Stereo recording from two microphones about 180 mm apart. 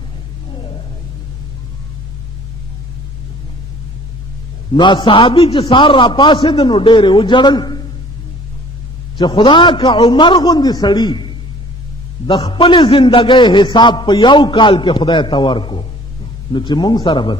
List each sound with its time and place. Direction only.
4.7 s a man's voice: 25° left (ahead or behind)
9.1 s a man's voice: 25° left (ahead or behind)
12.3 s a man's voice: 25° left (ahead or behind)